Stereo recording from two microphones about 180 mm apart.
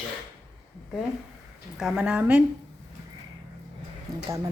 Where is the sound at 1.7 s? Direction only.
5° right (ahead or behind).